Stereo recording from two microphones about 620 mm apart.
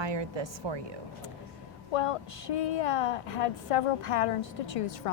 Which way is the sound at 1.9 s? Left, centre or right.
Left.